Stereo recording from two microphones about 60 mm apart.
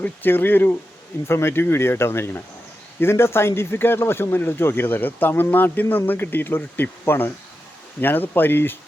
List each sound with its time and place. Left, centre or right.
0.0 s speech: left